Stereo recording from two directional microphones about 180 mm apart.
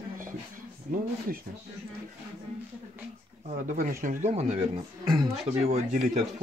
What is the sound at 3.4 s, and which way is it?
Speech, 40° right (ahead or behind).